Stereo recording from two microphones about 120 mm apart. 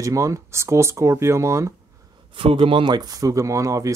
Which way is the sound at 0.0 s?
25° right (ahead or behind).